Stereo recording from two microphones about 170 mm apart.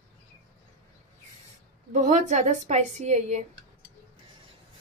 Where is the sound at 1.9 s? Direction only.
45° right (ahead or behind).